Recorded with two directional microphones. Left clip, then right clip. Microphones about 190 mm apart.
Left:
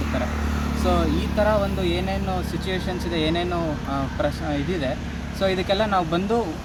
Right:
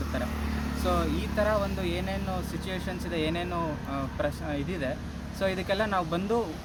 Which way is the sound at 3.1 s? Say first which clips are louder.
Left 6 dB; 30° right (ahead or behind).